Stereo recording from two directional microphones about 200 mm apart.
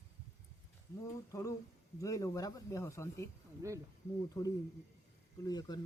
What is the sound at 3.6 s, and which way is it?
Speech, 15° right (ahead or behind).